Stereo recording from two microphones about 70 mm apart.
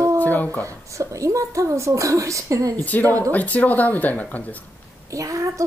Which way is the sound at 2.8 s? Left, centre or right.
Left.